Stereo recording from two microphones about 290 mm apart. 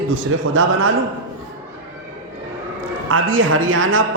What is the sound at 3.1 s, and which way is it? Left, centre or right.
Speech, right.